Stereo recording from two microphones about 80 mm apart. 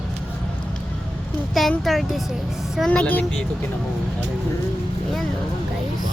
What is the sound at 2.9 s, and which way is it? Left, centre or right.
Speech, centre.